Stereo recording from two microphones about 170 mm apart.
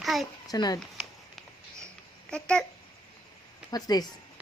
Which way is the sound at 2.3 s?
5° left (ahead or behind).